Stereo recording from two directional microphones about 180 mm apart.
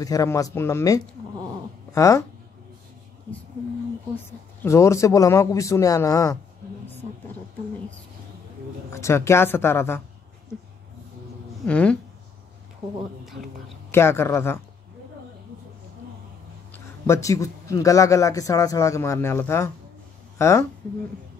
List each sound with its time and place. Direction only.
0.0 s a man's voice: 20° left (ahead or behind)
4.6 s a man's voice: 15° left (ahead or behind)
8.9 s a man's voice: 15° left (ahead or behind)
11.6 s a man's voice: 5° left (ahead or behind)
13.9 s a man's voice: 15° left (ahead or behind)
16.7 s a man's voice: 15° left (ahead or behind)